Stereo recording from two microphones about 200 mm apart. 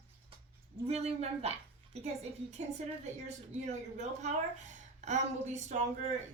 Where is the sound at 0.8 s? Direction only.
30° right (ahead or behind).